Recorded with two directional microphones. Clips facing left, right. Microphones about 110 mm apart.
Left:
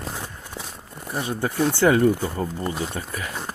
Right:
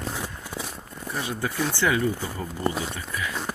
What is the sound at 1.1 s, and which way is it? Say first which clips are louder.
Speech: left 4 dB; 35° left (ahead or behind).